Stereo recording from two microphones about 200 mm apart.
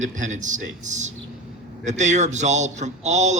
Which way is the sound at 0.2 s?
40° right (ahead or behind).